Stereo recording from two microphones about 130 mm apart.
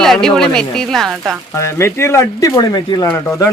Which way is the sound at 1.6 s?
20° left (ahead or behind).